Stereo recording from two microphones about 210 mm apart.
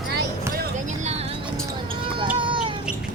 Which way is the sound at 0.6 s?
35° right (ahead or behind).